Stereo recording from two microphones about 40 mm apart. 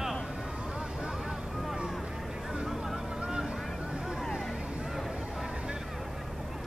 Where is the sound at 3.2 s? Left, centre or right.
Centre.